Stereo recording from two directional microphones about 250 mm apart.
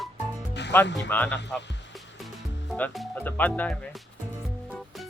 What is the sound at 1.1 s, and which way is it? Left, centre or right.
Speech, centre.